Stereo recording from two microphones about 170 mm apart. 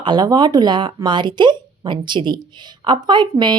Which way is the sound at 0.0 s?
25° right (ahead or behind).